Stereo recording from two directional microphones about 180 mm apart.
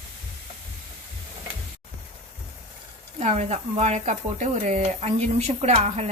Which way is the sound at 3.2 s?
40° right (ahead or behind).